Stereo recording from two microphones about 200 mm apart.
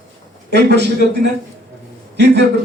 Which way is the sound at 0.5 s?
55° right (ahead or behind).